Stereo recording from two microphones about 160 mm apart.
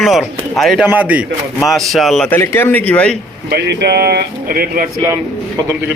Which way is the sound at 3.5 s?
90° right.